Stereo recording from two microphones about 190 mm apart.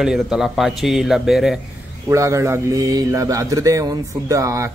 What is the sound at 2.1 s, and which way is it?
Speech, 15° right (ahead or behind).